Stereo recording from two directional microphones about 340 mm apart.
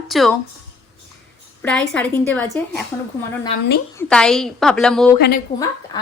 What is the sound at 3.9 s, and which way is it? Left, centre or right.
A woman's voice, centre.